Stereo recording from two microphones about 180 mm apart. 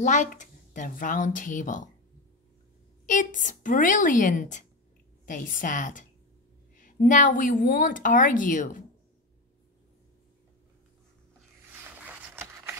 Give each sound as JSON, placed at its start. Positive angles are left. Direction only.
{"t": 0.0, "sound": "a woman's voice", "side_deg": 45}
{"t": 3.1, "sound": "a woman's voice", "side_deg": 45}
{"t": 12.3, "sound": "a sound", "side_deg": -15}